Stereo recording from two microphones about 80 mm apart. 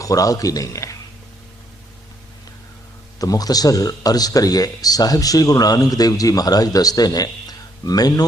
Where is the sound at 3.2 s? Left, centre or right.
Left.